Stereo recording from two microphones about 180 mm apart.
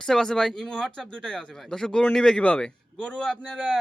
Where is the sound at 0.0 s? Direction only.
5° left (ahead or behind).